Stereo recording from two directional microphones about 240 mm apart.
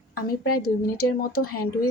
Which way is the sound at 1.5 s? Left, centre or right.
Left.